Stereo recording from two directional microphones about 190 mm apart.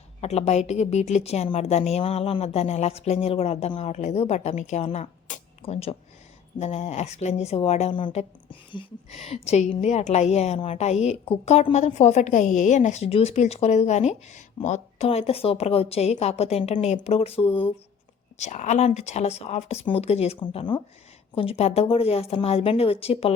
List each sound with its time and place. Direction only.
0.2 s a woman's voice: 35° left (ahead or behind)